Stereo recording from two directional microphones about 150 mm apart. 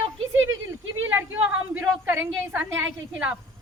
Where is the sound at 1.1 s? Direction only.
15° right (ahead or behind).